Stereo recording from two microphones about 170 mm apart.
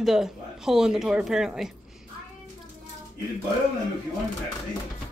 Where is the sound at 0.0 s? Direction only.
Centre (ahead or behind).